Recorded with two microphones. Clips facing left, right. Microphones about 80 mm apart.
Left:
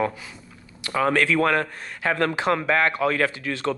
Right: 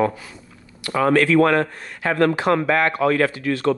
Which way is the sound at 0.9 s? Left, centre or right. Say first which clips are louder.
Right 4 dB; right.